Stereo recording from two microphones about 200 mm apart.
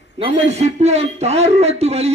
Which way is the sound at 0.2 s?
35° right (ahead or behind).